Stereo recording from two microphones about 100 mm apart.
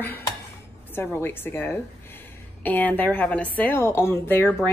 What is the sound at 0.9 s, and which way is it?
Speech, 20° left (ahead or behind).